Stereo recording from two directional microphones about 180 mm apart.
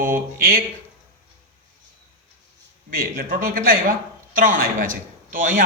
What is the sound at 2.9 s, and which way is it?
A man's voice, 50° right (ahead or behind).